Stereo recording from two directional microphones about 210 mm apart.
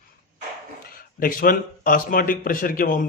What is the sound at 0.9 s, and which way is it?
A man's voice, 45° left (ahead or behind).